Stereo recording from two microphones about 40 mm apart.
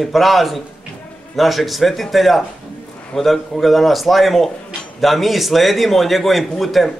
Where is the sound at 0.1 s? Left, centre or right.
Centre.